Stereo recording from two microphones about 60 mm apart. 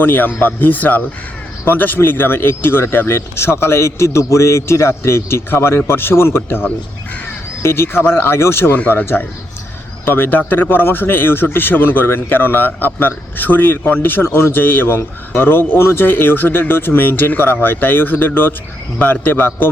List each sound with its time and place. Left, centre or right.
0.0 s speech: left